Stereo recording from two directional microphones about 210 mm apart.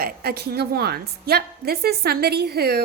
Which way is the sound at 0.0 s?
50° right (ahead or behind).